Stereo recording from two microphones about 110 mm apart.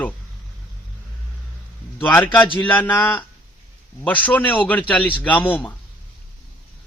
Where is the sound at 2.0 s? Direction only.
20° left (ahead or behind).